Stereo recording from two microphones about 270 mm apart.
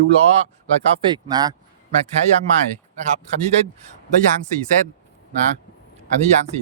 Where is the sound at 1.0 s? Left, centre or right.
Centre.